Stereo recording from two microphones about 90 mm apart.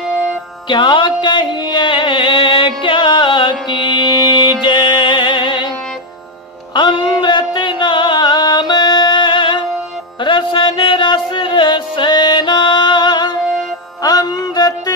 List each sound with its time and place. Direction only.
0.7 s music: 60° left (ahead or behind)
6.7 s a sound: 60° left (ahead or behind)
10.2 s music: 65° left (ahead or behind); by 15.0 s 45° left (ahead or behind)